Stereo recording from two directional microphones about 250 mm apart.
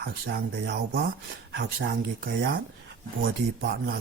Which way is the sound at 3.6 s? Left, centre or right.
Right.